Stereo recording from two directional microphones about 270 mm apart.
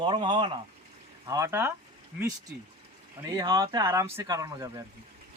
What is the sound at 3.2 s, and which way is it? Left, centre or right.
Speech, centre.